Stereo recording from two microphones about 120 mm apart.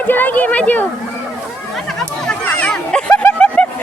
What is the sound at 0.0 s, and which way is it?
Speech, 15° left (ahead or behind).